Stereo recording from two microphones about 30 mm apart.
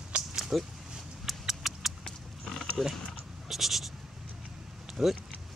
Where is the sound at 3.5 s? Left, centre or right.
Centre.